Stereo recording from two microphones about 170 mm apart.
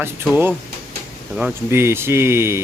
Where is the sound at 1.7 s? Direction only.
15° right (ahead or behind).